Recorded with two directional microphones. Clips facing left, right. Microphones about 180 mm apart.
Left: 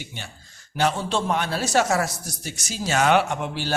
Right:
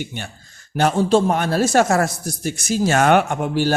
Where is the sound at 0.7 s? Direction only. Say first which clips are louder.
Right 7 dB; 45° right (ahead or behind).